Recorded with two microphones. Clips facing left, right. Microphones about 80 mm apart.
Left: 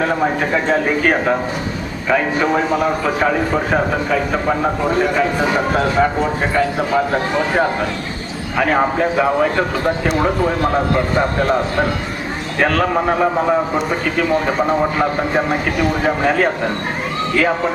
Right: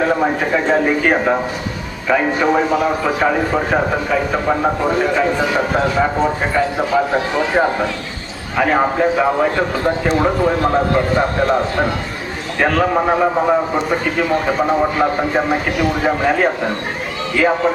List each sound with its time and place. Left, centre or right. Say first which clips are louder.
0.0 s speech: right 1 dB; centre